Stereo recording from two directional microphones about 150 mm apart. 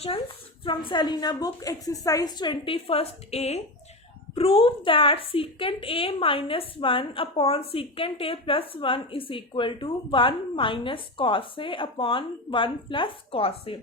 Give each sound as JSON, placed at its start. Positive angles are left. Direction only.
{"t": 0.0, "sound": "a woman's voice", "side_deg": 35}